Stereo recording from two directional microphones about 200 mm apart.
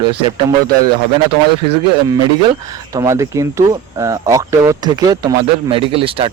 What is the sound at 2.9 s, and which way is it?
Speech, 15° right (ahead or behind).